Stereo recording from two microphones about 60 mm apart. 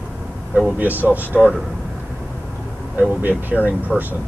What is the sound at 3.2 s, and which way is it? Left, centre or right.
Speech, right.